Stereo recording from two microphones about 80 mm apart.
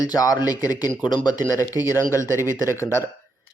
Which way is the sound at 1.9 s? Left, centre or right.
Left.